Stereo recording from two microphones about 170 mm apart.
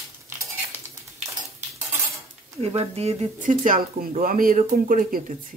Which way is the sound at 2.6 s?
35° right (ahead or behind).